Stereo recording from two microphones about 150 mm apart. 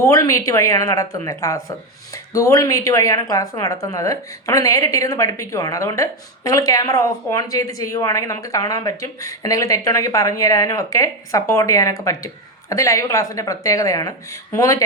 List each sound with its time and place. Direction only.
0.0 s a woman's voice: 25° left (ahead or behind)